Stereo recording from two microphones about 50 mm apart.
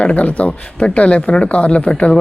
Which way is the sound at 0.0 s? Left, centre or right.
Left.